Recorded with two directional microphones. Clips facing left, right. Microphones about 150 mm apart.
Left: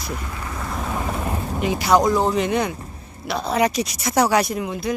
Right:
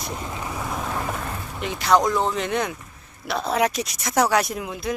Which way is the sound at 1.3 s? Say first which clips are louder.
Left 7 dB; 35° left (ahead or behind).